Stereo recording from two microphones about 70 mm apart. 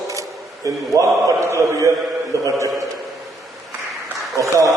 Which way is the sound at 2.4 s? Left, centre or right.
Right.